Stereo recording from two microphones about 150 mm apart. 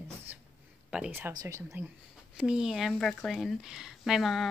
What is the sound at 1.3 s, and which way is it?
Speech, 20° right (ahead or behind).